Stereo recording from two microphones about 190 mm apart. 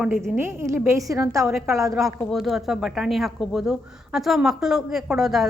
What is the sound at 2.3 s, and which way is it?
A woman's voice, centre (ahead or behind).